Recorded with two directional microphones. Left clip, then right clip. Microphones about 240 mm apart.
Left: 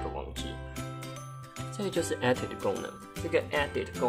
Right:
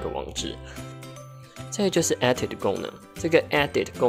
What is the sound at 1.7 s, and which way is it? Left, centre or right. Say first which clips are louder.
Speech: right 8 dB; right.